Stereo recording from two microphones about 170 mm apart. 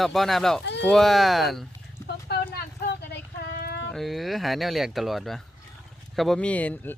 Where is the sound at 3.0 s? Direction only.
85° left.